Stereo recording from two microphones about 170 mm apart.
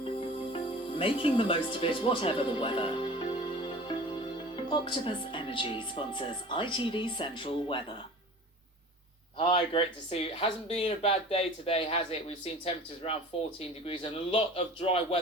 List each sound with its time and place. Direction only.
0.0 s speech: 35° left (ahead or behind)
9.4 s speech: 35° left (ahead or behind)